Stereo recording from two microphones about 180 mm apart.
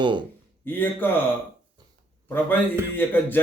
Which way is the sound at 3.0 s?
10° left (ahead or behind).